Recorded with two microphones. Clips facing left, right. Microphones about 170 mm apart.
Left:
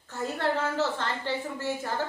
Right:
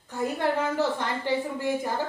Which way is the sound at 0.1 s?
15° right (ahead or behind).